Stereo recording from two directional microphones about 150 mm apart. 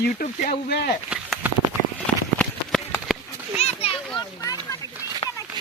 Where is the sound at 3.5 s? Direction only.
45° left (ahead or behind).